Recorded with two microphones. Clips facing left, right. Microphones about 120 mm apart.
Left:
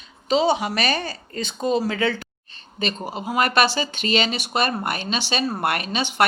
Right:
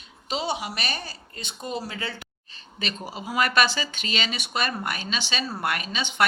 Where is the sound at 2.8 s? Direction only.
50° left (ahead or behind).